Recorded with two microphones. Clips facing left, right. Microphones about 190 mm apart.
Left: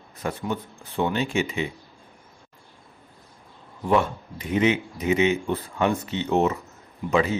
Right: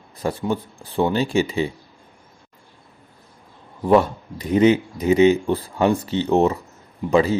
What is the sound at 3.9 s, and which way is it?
A man's voice, 35° right (ahead or behind).